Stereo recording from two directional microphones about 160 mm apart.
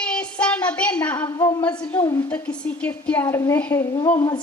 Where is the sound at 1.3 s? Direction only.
25° left (ahead or behind).